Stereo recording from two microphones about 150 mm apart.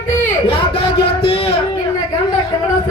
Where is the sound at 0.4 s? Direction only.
35° left (ahead or behind).